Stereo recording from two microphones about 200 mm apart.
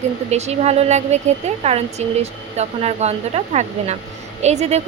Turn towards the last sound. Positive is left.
turn(degrees=-35)  # may be behind; listen again after turning